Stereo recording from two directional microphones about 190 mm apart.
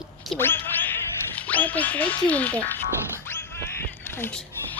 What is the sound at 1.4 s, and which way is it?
Music, 10° left (ahead or behind).